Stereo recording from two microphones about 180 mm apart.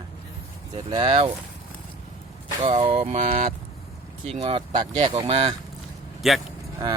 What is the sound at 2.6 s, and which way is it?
Speech, 30° right (ahead or behind).